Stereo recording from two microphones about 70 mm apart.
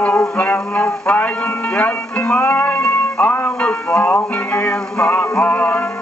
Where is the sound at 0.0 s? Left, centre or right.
Centre.